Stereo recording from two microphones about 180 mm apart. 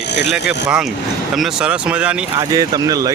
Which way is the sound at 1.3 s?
5° right (ahead or behind).